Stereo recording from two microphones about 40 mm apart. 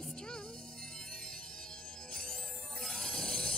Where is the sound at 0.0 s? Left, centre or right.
Centre.